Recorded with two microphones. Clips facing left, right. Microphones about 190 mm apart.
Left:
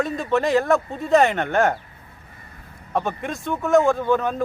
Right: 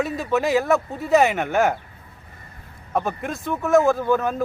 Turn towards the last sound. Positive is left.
turn(degrees=-5)  # may be behind; listen again after turning